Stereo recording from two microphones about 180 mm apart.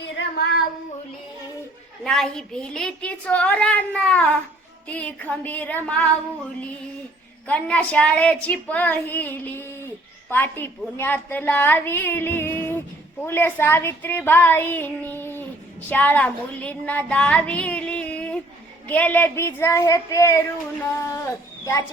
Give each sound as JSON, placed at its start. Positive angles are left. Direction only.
{"t": 2.0, "sound": "a woman's voice", "side_deg": 5}
{"t": 7.4, "sound": "a woman's voice", "side_deg": 10}
{"t": 15.9, "sound": "child singing", "side_deg": 10}
{"t": 18.9, "sound": "a woman's voice", "side_deg": 10}